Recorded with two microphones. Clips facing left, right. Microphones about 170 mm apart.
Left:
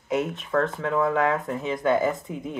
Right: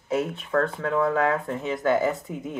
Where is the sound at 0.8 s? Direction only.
20° left (ahead or behind).